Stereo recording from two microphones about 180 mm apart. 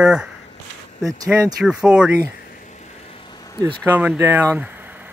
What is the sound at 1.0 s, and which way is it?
Speech, 20° right (ahead or behind).